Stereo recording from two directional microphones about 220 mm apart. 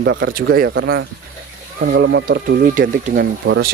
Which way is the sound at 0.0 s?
55° right (ahead or behind).